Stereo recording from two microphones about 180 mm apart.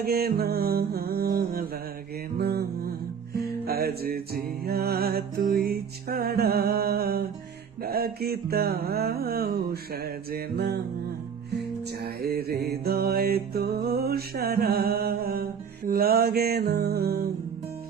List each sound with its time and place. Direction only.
0.0 s music: 60° right (ahead or behind)
12.0 s music: 60° right (ahead or behind)